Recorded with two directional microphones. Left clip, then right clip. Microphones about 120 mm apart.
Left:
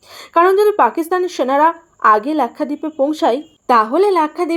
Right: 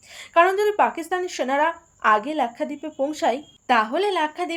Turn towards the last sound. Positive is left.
turn(degrees=40)  # may be behind; listen again after turning